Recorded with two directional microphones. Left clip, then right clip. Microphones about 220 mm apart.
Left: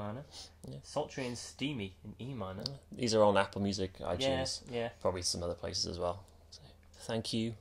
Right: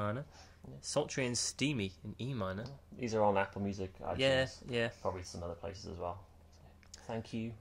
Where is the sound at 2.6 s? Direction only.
35° left (ahead or behind).